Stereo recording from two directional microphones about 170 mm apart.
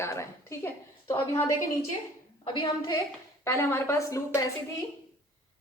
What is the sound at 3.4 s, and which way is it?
Speech, 15° left (ahead or behind).